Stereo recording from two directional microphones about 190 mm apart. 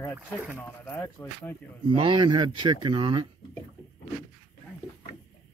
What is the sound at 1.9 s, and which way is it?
Speech, 25° right (ahead or behind).